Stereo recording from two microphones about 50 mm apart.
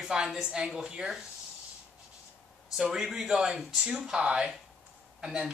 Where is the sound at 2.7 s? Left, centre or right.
Centre.